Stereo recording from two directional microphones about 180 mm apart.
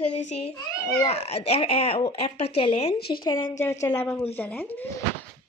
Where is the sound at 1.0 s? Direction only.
35° left (ahead or behind).